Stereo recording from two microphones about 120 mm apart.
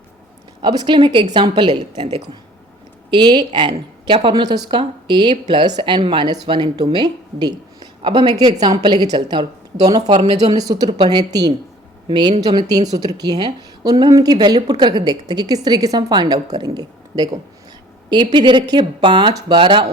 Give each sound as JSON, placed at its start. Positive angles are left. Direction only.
{"t": 0.6, "sound": "a woman's voice", "side_deg": -35}
{"t": 3.1, "sound": "a woman's voice", "side_deg": -40}